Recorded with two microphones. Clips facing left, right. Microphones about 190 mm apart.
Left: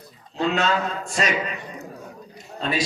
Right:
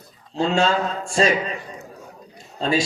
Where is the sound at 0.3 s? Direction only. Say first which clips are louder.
Right 3 dB; 30° right (ahead or behind).